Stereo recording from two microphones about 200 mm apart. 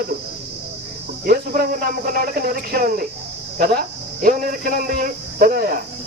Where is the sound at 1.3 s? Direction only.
45° right (ahead or behind).